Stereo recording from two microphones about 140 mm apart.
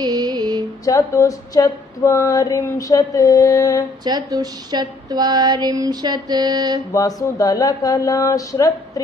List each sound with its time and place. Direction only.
0.0 s music: 30° right (ahead or behind)
0.8 s female singing: 25° left (ahead or behind)
4.0 s speech: 30° right (ahead or behind)
6.9 s female singing: 25° left (ahead or behind)